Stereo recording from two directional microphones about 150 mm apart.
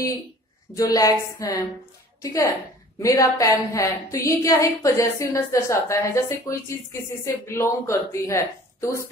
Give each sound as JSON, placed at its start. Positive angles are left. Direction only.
{"t": 0.7, "sound": "a woman's voice", "side_deg": 25}